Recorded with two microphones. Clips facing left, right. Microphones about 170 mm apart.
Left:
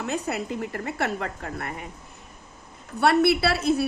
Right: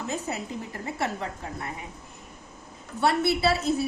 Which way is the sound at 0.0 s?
65° left (ahead or behind).